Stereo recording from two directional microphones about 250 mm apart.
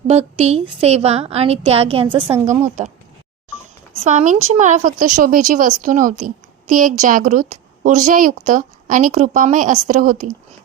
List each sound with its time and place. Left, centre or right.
0.1 s a woman's voice: right
4.0 s speech: right